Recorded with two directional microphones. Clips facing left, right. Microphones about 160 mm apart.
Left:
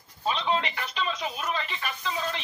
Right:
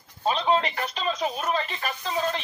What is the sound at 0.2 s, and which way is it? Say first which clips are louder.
Speech: right 4 dB; 40° right (ahead or behind).